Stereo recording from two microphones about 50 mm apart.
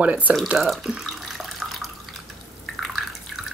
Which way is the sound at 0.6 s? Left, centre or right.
Centre.